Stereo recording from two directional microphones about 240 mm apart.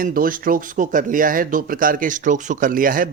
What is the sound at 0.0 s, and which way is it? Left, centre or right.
Speech, right.